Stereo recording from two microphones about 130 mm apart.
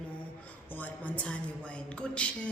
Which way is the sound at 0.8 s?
10° left (ahead or behind).